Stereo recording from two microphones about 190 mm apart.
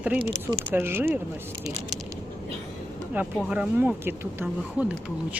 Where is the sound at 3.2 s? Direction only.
10° right (ahead or behind).